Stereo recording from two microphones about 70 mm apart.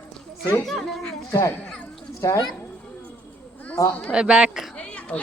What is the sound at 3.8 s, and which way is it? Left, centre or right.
Speech, left.